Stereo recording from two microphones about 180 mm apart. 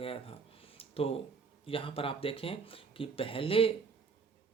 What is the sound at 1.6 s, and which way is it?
Speech, 30° left (ahead or behind).